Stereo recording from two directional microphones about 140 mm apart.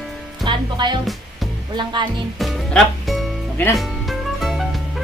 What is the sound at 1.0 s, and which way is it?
Music, centre (ahead or behind).